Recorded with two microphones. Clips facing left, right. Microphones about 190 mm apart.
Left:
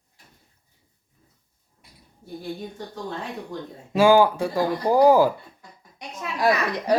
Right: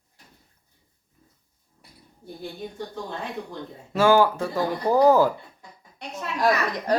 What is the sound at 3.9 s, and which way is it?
A woman's voice, 15° left (ahead or behind).